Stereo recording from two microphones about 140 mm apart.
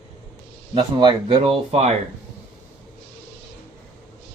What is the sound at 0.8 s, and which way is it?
Speech, 35° right (ahead or behind).